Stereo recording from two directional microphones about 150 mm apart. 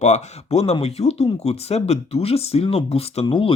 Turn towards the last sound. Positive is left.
turn(degrees=35)  # may be behind; listen again after turning